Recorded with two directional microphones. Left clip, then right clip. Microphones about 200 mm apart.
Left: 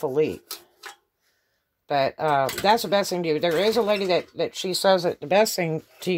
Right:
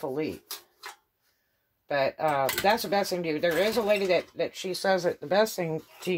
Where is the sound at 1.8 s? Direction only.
45° left (ahead or behind).